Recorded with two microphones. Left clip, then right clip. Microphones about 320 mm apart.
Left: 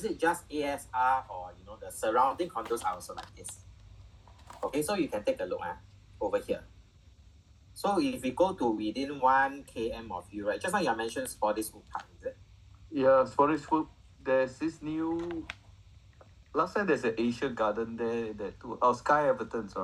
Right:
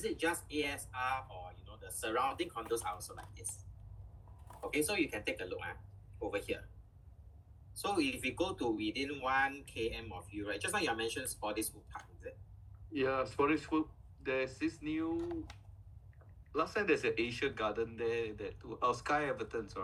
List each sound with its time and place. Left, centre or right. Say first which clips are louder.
0.0 s speech: left 6 dB; centre
4.7 s speech: left 3 dB; centre
7.8 s speech: left 5 dB; centre
12.9 s speech: left 11 dB; centre
16.5 s speech: left 5 dB; centre